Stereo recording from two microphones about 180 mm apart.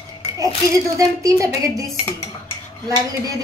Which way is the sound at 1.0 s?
20° right (ahead or behind).